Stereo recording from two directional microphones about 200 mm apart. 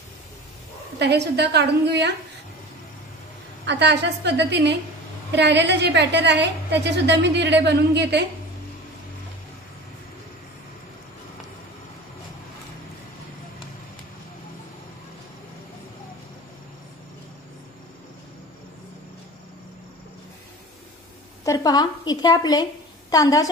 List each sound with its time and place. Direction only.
0.9 s a woman's voice: 55° right (ahead or behind)
3.6 s a woman's voice: 60° right (ahead or behind)
21.5 s a woman's voice: 20° left (ahead or behind)